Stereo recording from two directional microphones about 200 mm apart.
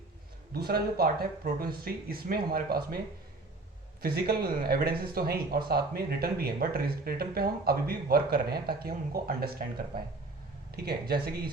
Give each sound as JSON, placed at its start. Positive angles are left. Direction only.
{"t": 0.5, "sound": "speech", "side_deg": -50}
{"t": 4.0, "sound": "speech", "side_deg": -50}